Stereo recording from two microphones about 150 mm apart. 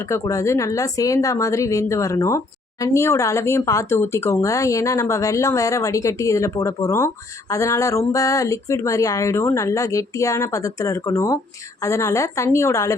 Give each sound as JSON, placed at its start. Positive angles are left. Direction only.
{"t": 0.1, "sound": "speech", "side_deg": 20}